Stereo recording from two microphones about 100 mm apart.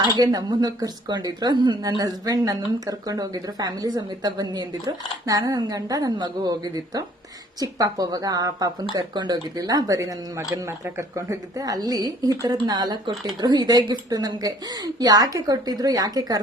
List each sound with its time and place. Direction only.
0.1 s speech: 40° right (ahead or behind)
7.6 s speech: 35° right (ahead or behind)